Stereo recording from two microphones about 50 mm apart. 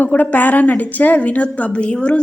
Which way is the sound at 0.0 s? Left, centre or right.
Left.